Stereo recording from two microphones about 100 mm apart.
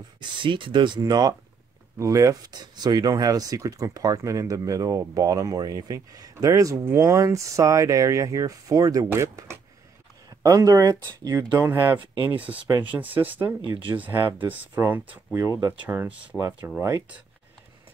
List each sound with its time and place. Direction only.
0.2 s speech: 55° right (ahead or behind)
2.0 s speech: 30° right (ahead or behind)
11.6 s speech: 25° right (ahead or behind)
16.3 s speech: 35° right (ahead or behind)